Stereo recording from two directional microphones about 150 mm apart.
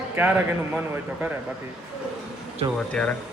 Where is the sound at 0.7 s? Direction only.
10° right (ahead or behind).